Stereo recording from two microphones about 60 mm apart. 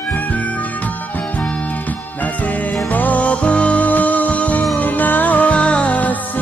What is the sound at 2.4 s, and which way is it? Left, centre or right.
Music, left.